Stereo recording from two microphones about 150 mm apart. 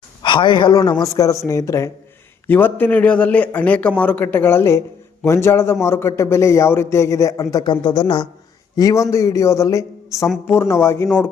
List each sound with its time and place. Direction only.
0.2 s a man's voice: 35° left (ahead or behind)